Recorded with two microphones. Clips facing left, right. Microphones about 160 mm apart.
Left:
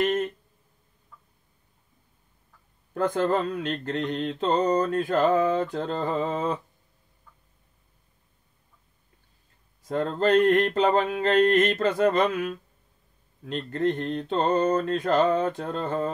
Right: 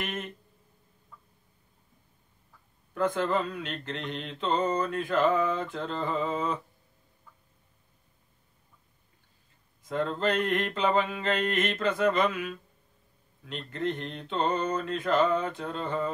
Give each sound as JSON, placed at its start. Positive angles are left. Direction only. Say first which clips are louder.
{"t": 0.0, "sound": "a sound", "louder": "left 11 dB", "side_deg": 40}
{"t": 2.9, "sound": "mantra", "louder": "left 3 dB", "side_deg": 40}
{"t": 9.8, "sound": "mantra", "louder": "left 5 dB", "side_deg": 40}